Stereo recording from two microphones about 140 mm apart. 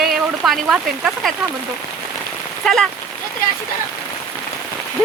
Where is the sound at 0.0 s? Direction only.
Centre (ahead or behind).